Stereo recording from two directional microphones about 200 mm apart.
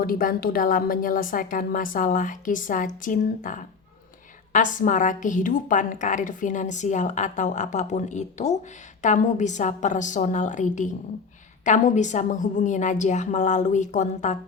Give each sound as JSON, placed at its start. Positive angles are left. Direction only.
{"t": 0.0, "sound": "a woman's voice", "side_deg": 45}